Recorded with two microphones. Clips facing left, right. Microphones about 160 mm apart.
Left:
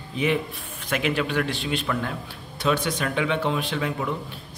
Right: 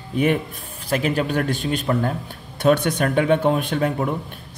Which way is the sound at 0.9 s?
40° right (ahead or behind).